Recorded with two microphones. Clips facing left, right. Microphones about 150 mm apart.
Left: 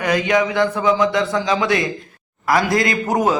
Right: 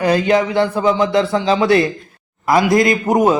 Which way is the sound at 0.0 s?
35° right (ahead or behind).